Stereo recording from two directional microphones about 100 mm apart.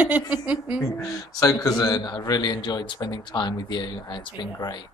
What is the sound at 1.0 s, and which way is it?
A man's voice, 30° left (ahead or behind).